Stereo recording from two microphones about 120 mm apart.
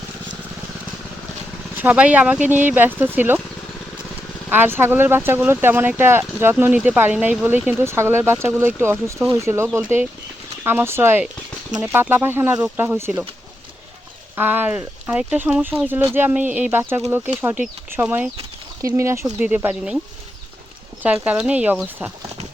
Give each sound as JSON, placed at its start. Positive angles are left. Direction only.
{"t": 1.7, "sound": "speech", "side_deg": -15}
{"t": 4.4, "sound": "speech", "side_deg": -15}
{"t": 14.3, "sound": "speech", "side_deg": -15}
{"t": 19.2, "sound": "speech", "side_deg": -15}
{"t": 21.0, "sound": "speech", "side_deg": -10}